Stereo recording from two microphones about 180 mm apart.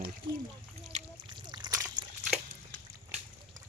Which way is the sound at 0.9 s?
40° right (ahead or behind).